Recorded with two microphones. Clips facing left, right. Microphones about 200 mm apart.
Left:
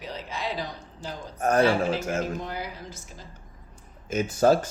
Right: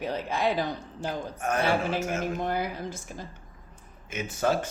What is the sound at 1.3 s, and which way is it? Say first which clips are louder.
Speech: left 8 dB; 40° left (ahead or behind).